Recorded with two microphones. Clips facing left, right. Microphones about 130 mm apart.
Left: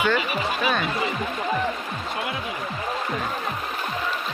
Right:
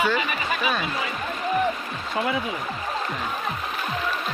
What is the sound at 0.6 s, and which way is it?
Speech, centre (ahead or behind).